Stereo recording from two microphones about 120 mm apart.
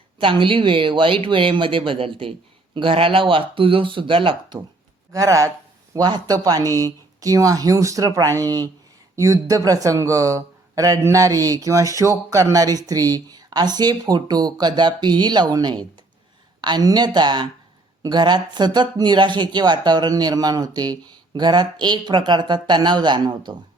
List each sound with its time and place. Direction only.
0.2 s speech: 45° right (ahead or behind)
5.1 s speech: 25° right (ahead or behind)